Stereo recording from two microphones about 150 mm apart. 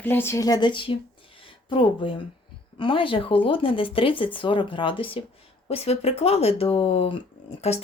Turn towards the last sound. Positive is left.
turn(degrees=45)  # may be behind; listen again after turning